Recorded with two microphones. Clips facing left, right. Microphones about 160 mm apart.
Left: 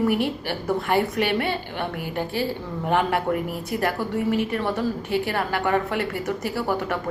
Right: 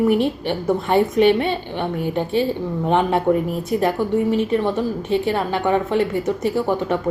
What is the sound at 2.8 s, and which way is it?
A woman's voice, 20° right (ahead or behind).